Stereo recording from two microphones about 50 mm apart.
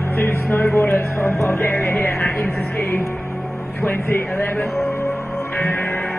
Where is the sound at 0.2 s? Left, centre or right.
Left.